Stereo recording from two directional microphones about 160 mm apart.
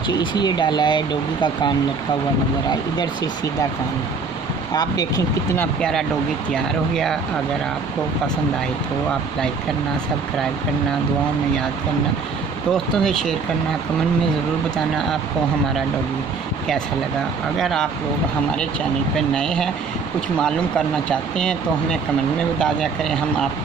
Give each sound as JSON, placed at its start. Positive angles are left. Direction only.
{"t": 0.2, "sound": "speech", "side_deg": 30}
{"t": 4.7, "sound": "speech", "side_deg": 25}
{"t": 5.6, "sound": "speech", "side_deg": 5}
{"t": 12.7, "sound": "speech", "side_deg": 5}
{"t": 17.6, "sound": "speech", "side_deg": 0}
{"t": 19.1, "sound": "speech", "side_deg": 5}
{"t": 21.1, "sound": "speech", "side_deg": 5}
{"t": 22.6, "sound": "speech", "side_deg": 5}